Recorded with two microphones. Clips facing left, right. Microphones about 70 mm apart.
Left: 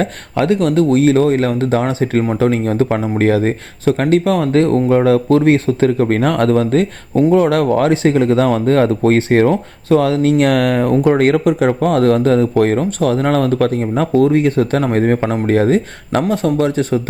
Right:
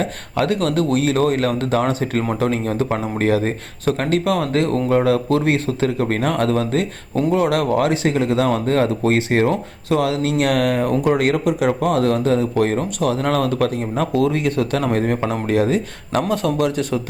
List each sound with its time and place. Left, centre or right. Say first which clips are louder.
0.0 s speech: left 4 dB; left
2.4 s speech: left 5 dB; left